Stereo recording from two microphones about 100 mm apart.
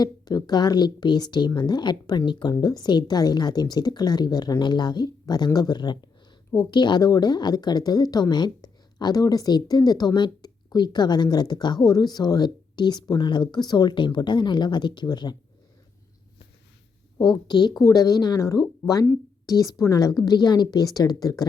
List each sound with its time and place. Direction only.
0.0 s speech: 40° left (ahead or behind)
17.2 s speech: 45° left (ahead or behind)